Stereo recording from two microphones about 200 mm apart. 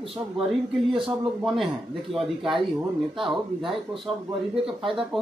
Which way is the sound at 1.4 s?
Centre (ahead or behind).